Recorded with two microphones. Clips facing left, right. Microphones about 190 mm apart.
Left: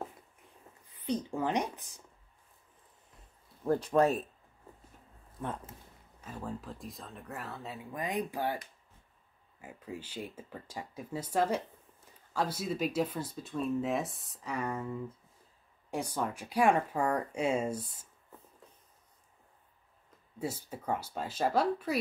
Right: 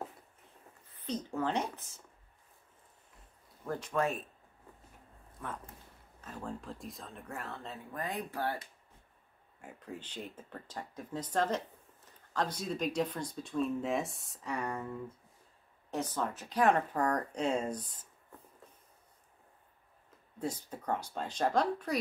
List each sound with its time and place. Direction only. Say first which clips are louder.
1.0 s speech: left 2 dB; 15° left (ahead or behind)
3.6 s speech: left 7 dB; 35° left (ahead or behind)
6.2 s speech: left 1 dB; 5° left (ahead or behind)
9.6 s speech: left 2 dB; 5° left (ahead or behind)
15.9 s speech: left 1 dB; 10° left (ahead or behind)
20.3 s speech: even; 10° left (ahead or behind)